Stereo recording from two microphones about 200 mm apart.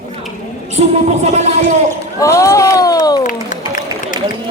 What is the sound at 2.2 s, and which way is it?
Speech, 15° left (ahead or behind).